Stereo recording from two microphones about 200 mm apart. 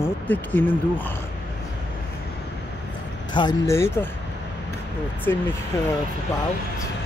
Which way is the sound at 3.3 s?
20° left (ahead or behind).